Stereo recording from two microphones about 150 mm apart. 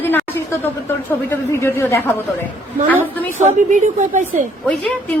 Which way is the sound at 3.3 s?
55° right (ahead or behind).